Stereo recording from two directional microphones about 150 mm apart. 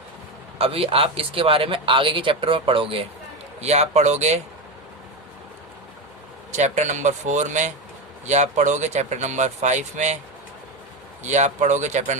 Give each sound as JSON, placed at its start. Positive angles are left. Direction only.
{"t": 0.6, "sound": "speech", "side_deg": -40}
{"t": 6.6, "sound": "speech", "side_deg": -55}
{"t": 11.2, "sound": "speech", "side_deg": -50}